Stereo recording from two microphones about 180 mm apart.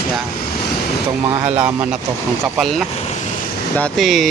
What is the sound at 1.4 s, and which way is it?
Speech, 30° right (ahead or behind).